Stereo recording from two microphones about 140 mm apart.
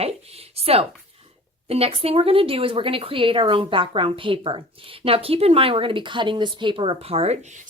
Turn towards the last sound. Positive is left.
turn(degrees=-55)  # may be behind; listen again after turning